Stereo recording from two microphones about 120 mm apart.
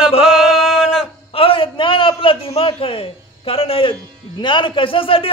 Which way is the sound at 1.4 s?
50° left (ahead or behind).